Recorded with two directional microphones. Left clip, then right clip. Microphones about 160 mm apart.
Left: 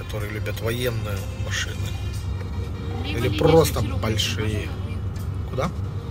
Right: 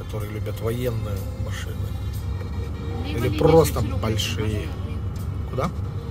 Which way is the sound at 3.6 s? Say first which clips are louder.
Even; 40° right (ahead or behind).